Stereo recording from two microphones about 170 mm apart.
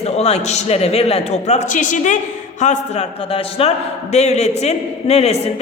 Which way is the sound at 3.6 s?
35° left (ahead or behind).